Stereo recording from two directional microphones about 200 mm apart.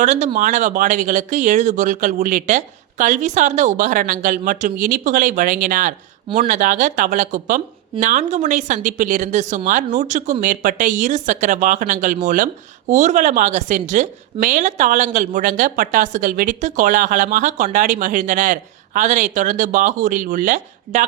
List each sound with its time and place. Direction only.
0.0 s a woman's voice: 35° right (ahead or behind)